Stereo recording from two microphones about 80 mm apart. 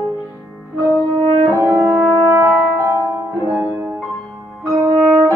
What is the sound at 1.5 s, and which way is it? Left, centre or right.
French horn, right.